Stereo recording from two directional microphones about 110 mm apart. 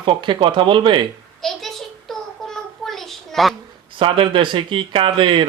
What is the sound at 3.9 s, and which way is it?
Speech, 50° right (ahead or behind).